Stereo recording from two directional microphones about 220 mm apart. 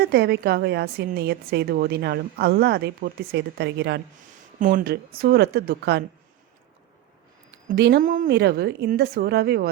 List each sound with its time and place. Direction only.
0.0 s a woman's voice: 45° right (ahead or behind)
7.7 s a woman's voice: 50° right (ahead or behind)
8.0 s a woman's voice: 35° right (ahead or behind)